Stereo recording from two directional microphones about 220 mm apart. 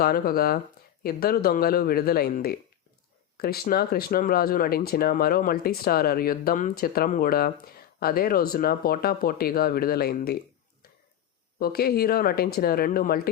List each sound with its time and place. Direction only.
0.0 s speech: 40° left (ahead or behind)
11.6 s speech: 45° left (ahead or behind)